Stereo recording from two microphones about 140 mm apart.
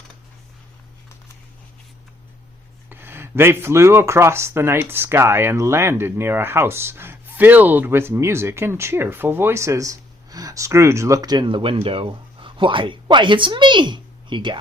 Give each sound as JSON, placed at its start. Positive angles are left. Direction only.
{"t": 2.9, "sound": "speech", "side_deg": -15}